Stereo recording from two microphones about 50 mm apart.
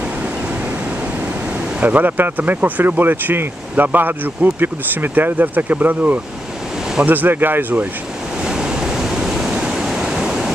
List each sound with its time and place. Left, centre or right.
1.8 s speech: right
8.5 s pink noise: centre